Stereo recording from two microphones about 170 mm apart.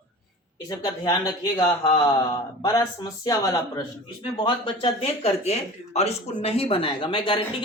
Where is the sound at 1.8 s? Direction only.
35° left (ahead or behind).